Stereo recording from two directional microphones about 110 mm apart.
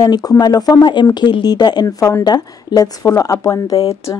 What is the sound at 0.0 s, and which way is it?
Speech, 35° left (ahead or behind).